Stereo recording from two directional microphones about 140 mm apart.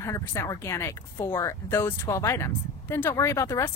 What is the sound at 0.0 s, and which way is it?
Speech, 20° left (ahead or behind).